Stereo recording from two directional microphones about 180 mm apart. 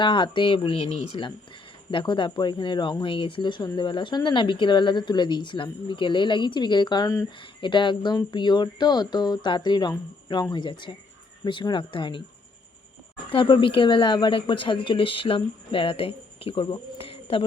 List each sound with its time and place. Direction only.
0.0 s speech: 25° left (ahead or behind)
13.3 s speech: 25° left (ahead or behind)